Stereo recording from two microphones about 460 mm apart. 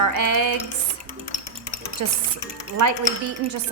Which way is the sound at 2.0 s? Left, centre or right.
Right.